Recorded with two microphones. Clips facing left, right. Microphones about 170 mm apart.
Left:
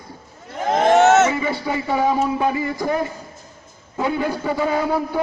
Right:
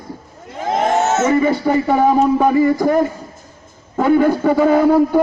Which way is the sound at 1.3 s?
45° right (ahead or behind).